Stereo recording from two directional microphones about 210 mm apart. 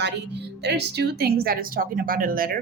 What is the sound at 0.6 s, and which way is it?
A woman's voice, 50° right (ahead or behind).